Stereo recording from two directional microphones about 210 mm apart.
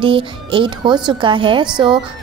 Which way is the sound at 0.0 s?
25° right (ahead or behind).